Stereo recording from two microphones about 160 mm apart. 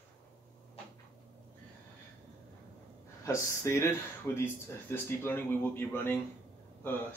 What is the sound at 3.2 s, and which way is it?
Speech, 15° left (ahead or behind).